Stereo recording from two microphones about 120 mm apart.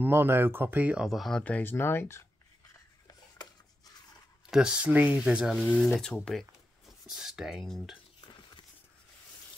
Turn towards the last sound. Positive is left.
turn(degrees=0)  # may be behind; listen again after turning